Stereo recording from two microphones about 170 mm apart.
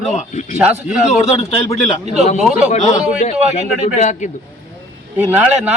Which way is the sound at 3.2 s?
45° left (ahead or behind).